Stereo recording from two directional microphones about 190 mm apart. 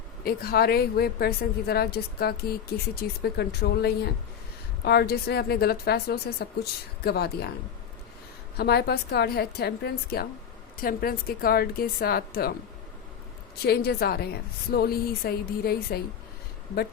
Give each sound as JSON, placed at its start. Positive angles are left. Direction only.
{"t": 0.3, "sound": "a woman's voice", "side_deg": 55}
{"t": 8.5, "sound": "a woman's voice", "side_deg": 55}
{"t": 13.7, "sound": "a woman's voice", "side_deg": 55}